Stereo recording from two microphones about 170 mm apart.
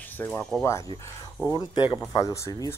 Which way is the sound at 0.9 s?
25° left (ahead or behind).